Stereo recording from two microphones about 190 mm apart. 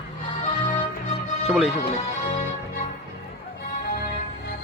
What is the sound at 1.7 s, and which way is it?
Music, 35° left (ahead or behind).